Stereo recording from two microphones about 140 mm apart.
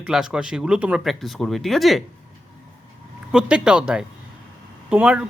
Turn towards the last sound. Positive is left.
turn(degrees=-5)  # may be behind; listen again after turning